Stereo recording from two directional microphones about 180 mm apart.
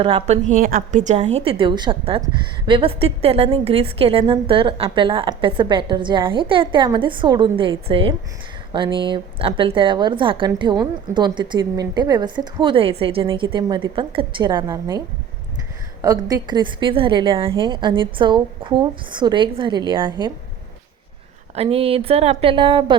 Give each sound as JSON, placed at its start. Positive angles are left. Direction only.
{"t": 0.0, "sound": "a woman's voice", "side_deg": -35}
{"t": 21.5, "sound": "a woman's voice", "side_deg": -35}